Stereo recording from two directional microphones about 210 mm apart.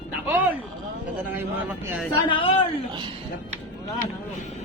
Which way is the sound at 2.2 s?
25° left (ahead or behind).